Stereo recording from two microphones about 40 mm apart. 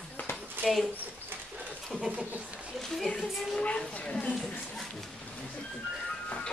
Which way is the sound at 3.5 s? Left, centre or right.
Left.